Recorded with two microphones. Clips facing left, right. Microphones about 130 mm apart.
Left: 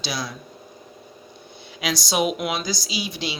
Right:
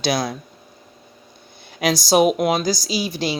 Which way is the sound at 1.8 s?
40° right (ahead or behind).